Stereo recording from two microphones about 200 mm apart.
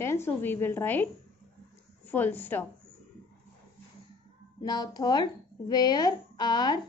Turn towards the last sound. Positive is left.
turn(degrees=20)  # may be behind; listen again after turning